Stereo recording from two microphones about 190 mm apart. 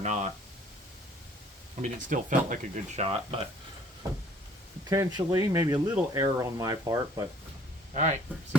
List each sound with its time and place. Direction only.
0.0 s speech: 40° right (ahead or behind)
1.8 s speech: 45° right (ahead or behind)
4.9 s speech: 20° right (ahead or behind)
7.9 s speech: 40° right (ahead or behind)